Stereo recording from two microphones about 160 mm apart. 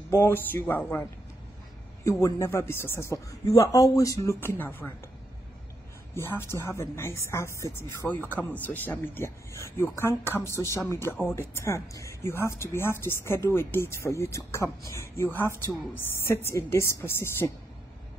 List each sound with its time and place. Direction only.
0.1 s a woman's voice: 15° left (ahead or behind)
2.0 s a man's voice: 20° left (ahead or behind)
6.1 s a woman's voice: 15° left (ahead or behind)